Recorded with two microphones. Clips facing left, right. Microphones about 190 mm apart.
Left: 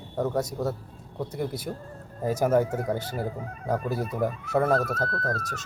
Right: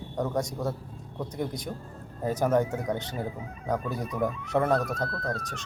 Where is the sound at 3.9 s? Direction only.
5° left (ahead or behind).